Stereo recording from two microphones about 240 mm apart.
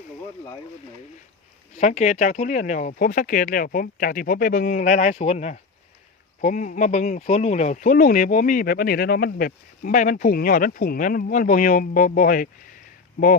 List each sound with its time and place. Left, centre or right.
1.7 s speech: left